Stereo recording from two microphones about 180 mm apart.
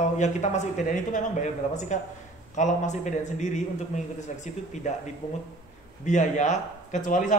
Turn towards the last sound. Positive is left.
turn(degrees=45)  # may be behind; listen again after turning